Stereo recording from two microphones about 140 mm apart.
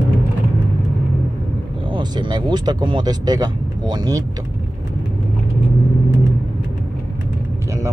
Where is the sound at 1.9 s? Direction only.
30° right (ahead or behind).